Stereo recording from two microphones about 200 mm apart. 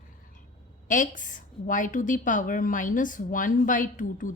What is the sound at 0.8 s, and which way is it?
A woman's voice, 40° left (ahead or behind).